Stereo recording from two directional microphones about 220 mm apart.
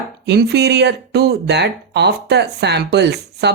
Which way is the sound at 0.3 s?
50° right (ahead or behind).